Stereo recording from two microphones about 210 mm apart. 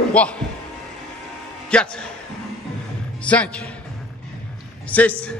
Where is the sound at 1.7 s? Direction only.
5° left (ahead or behind).